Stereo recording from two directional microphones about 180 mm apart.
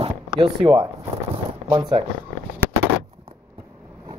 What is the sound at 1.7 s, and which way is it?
Speech, 25° right (ahead or behind).